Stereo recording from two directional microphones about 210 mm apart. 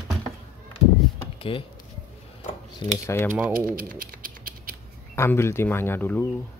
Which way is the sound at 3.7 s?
40° right (ahead or behind).